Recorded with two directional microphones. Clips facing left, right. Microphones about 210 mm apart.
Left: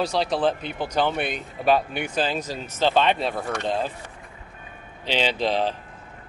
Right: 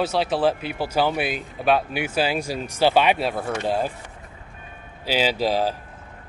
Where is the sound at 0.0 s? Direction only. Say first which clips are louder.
Right 2 dB; 5° right (ahead or behind).